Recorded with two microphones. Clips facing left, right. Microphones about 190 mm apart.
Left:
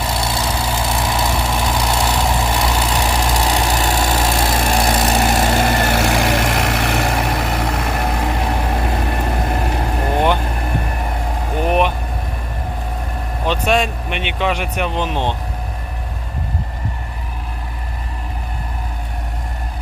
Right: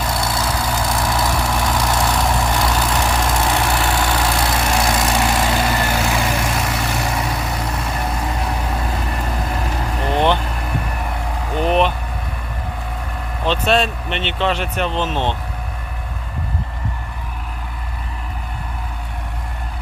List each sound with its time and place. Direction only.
0.0 s vehicle: 25° left (ahead or behind)
2.9 s engine: 10° left (ahead or behind); by 5.9 s 45° left (ahead or behind)
5.9 s vehicle: 60° left (ahead or behind)
11.6 s vehicle: 10° left (ahead or behind)
13.4 s speech: 10° left (ahead or behind)